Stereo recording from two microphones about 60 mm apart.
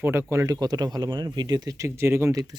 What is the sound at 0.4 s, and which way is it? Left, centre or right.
Speech, right.